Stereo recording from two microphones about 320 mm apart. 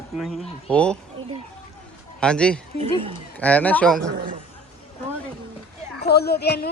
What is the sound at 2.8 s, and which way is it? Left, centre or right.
Speech, centre.